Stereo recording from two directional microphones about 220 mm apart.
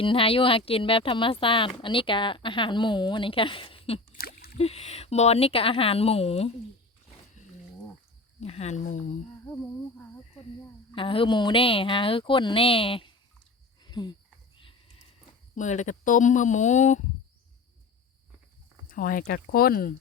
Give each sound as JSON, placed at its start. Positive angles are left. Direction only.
{"t": 0.0, "sound": "speech", "side_deg": 25}
{"t": 4.2, "sound": "a sound", "side_deg": 45}
{"t": 4.5, "sound": "speech", "side_deg": 30}
{"t": 8.4, "sound": "speech", "side_deg": 30}
{"t": 10.9, "sound": "speech", "side_deg": 25}
{"t": 13.8, "sound": "a sound", "side_deg": 20}
{"t": 15.5, "sound": "speech", "side_deg": 35}
{"t": 18.9, "sound": "speech", "side_deg": 40}